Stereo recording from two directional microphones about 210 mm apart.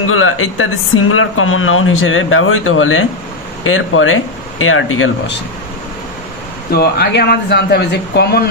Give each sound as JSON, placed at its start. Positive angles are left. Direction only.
{"t": 0.0, "sound": "speech", "side_deg": 85}
{"t": 6.7, "sound": "speech", "side_deg": 50}